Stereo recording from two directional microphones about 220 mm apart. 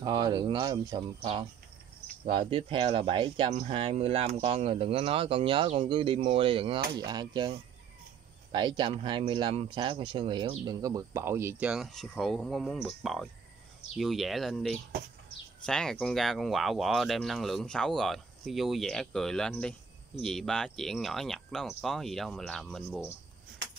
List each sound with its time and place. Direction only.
0.0 s speech: 20° right (ahead or behind); by 23.0 s centre (ahead or behind)